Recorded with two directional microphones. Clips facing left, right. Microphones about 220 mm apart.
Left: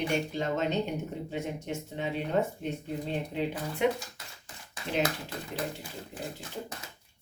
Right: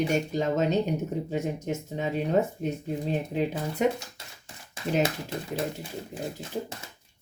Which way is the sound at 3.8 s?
40° right (ahead or behind).